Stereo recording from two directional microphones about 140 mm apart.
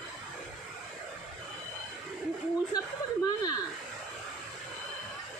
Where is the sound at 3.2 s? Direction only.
30° left (ahead or behind).